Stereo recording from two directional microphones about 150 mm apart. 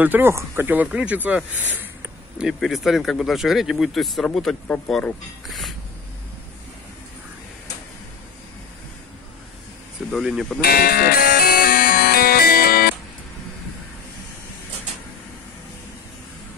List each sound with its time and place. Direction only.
0.0 s speech: 15° right (ahead or behind)
10.1 s speech: centre (ahead or behind)
10.6 s music: 90° left